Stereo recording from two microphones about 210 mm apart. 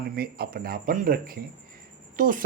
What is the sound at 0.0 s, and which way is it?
Speech, 45° right (ahead or behind).